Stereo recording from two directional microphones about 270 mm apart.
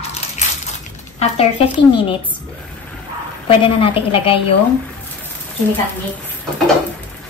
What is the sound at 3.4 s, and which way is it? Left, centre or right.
Speech, centre.